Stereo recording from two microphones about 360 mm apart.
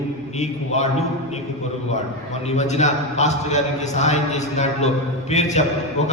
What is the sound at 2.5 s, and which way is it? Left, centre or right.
A man's voice, centre.